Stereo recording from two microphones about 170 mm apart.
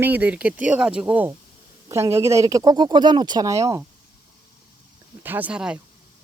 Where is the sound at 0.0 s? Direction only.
10° right (ahead or behind).